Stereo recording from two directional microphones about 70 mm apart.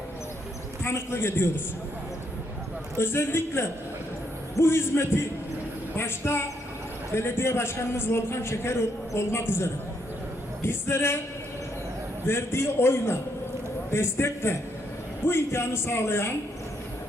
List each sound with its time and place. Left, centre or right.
0.9 s a man's voice: left
3.0 s a man's voice: left
12.3 s a man's voice: left